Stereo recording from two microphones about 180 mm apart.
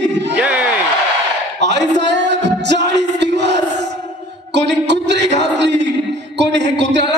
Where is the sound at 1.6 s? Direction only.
75° right (ahead or behind).